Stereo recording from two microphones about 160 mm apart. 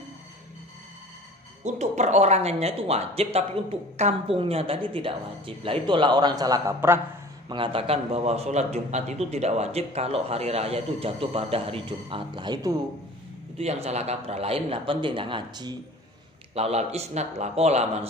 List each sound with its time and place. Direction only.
1.6 s speech: 45° right (ahead or behind); by 7.0 s 20° right (ahead or behind)
7.4 s speech: 30° right (ahead or behind)
13.6 s speech: 40° right (ahead or behind)
16.5 s speech: 40° right (ahead or behind)